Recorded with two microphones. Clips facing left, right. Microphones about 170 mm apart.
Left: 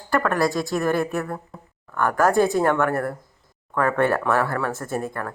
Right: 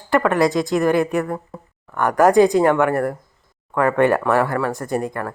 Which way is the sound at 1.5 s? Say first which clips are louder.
Right 5 dB; centre (ahead or behind).